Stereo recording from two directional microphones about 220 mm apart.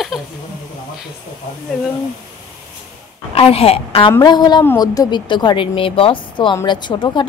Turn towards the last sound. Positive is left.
turn(degrees=20)  # may be behind; listen again after turning